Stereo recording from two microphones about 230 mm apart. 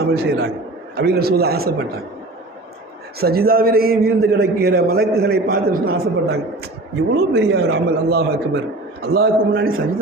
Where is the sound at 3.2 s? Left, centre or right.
Right.